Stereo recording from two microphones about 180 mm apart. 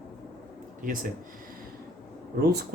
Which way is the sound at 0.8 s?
50° right (ahead or behind).